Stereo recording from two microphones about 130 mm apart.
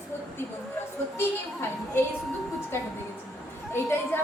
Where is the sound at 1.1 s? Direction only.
20° left (ahead or behind).